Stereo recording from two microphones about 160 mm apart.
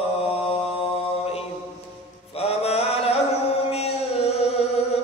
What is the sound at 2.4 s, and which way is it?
Mantra, 40° left (ahead or behind).